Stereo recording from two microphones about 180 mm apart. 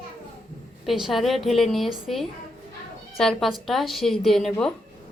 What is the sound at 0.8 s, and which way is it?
Speech, centre (ahead or behind).